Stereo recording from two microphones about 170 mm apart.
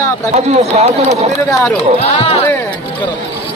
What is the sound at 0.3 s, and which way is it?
Speech, 40° right (ahead or behind).